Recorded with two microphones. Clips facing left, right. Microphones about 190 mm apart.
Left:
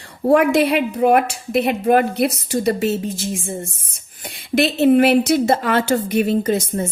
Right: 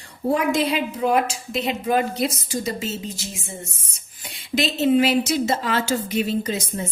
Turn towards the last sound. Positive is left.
turn(degrees=50)  # may be behind; listen again after turning